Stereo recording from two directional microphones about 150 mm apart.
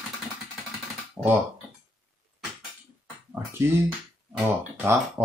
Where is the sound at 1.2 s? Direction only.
15° right (ahead or behind).